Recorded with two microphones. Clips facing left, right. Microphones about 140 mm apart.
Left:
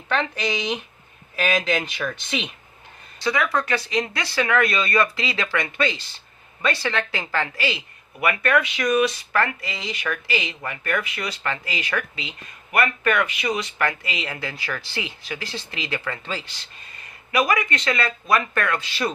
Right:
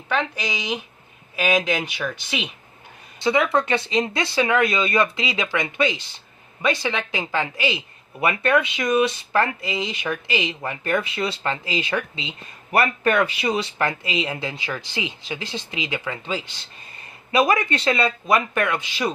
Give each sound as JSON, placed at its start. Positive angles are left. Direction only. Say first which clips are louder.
{"t": 0.1, "sound": "a woman's voice", "louder": "left 1 dB", "side_deg": -5}
{"t": 3.2, "sound": "a woman's voice", "louder": "right 3 dB", "side_deg": -25}
{"t": 17.3, "sound": "speech", "louder": "right 2 dB", "side_deg": -25}